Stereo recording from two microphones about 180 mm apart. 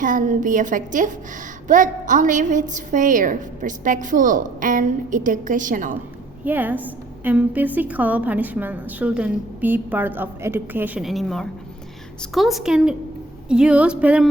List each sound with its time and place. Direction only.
0.0 s a woman's voice: 45° right (ahead or behind)
6.4 s a woman's voice: 10° right (ahead or behind)